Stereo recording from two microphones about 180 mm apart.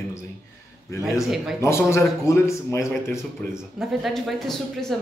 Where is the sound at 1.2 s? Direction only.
Centre (ahead or behind).